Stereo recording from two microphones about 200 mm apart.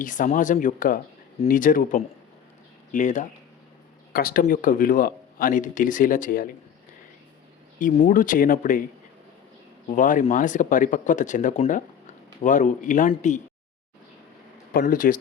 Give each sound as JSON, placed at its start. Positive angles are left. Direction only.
{"t": 0.0, "sound": "speech", "side_deg": 40}
{"t": 7.8, "sound": "speech", "side_deg": 40}
{"t": 9.9, "sound": "speech", "side_deg": 40}
{"t": 14.7, "sound": "speech", "side_deg": 45}